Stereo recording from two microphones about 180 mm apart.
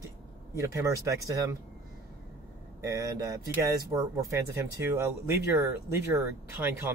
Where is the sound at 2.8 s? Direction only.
20° right (ahead or behind).